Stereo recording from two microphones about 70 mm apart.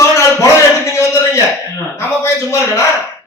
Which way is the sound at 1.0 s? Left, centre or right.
Left.